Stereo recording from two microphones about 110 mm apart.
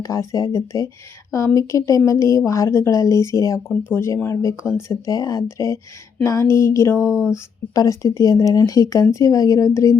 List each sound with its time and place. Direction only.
0.0 s speech: 30° left (ahead or behind)
7.1 s speech: 5° right (ahead or behind)
7.7 s speech: 30° left (ahead or behind)